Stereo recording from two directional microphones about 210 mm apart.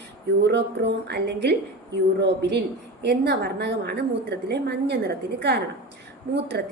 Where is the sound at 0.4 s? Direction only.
55° right (ahead or behind).